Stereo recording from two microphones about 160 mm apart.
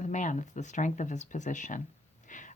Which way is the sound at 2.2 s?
50° left (ahead or behind).